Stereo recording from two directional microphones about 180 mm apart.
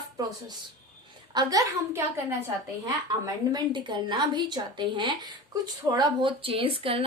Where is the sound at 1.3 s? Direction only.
20° right (ahead or behind).